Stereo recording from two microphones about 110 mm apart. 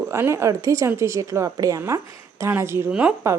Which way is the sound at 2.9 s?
10° right (ahead or behind).